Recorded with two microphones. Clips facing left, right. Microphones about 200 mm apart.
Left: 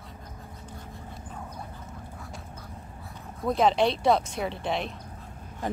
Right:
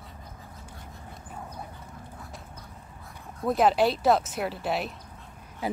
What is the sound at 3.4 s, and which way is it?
Speech, 5° right (ahead or behind).